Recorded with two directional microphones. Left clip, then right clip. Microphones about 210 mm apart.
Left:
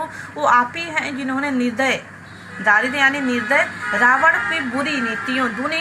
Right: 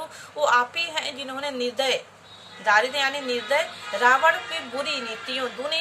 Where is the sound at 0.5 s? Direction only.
20° right (ahead or behind).